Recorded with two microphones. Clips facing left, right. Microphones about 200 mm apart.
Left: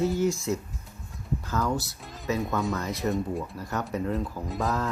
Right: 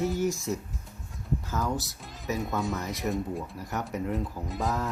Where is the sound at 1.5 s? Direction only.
20° right (ahead or behind).